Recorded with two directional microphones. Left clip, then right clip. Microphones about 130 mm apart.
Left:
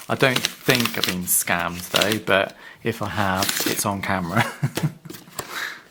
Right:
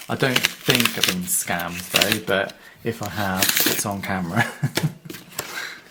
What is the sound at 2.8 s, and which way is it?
Speech, 40° left (ahead or behind).